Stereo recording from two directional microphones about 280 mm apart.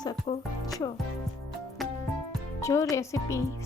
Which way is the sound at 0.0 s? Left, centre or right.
Centre.